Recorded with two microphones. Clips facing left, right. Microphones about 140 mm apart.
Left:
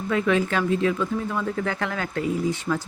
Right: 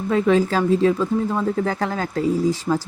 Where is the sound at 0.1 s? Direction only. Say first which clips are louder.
Right 5 dB; 35° right (ahead or behind).